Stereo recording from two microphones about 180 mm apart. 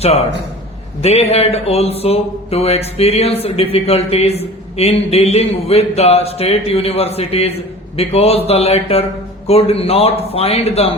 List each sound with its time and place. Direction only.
1.0 s speech: 35° left (ahead or behind)